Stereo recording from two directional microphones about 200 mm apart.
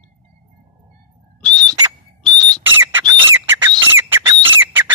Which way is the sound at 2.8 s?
15° right (ahead or behind).